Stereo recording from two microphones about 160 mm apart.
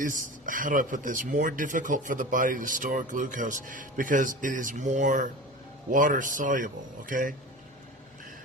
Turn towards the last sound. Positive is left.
turn(degrees=-55)  # may be behind; listen again after turning